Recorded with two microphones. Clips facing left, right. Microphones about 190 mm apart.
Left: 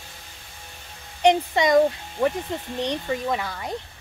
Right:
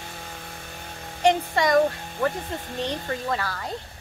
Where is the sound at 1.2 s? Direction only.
20° left (ahead or behind).